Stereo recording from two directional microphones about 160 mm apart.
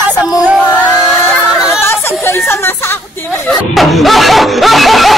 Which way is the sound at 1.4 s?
5° right (ahead or behind).